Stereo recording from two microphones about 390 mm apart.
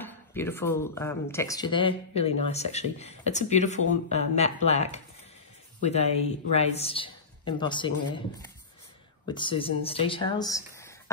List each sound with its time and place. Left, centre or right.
0.0 s speech: centre
9.3 s speech: centre